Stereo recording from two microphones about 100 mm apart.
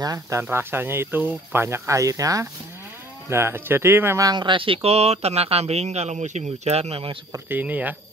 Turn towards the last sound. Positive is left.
turn(degrees=-15)  # may be behind; listen again after turning